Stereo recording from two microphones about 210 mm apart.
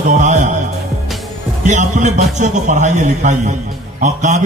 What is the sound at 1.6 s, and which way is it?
A man's voice, 35° right (ahead or behind).